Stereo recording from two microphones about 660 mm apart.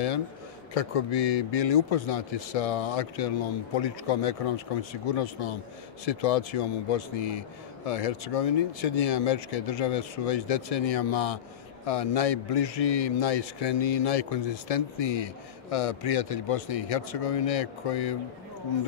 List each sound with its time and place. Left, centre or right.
0.7 s a man's voice: left